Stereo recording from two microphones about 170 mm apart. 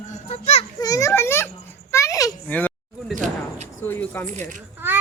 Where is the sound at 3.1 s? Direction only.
45° right (ahead or behind).